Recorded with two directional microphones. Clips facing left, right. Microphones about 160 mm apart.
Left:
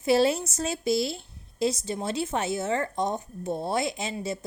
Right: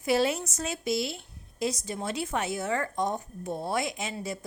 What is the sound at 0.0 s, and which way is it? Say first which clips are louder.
A woman's voice: left 4 dB; 30° left (ahead or behind).